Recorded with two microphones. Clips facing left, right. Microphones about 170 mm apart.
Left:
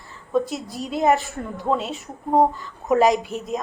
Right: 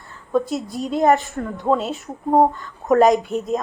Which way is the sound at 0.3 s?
Centre (ahead or behind).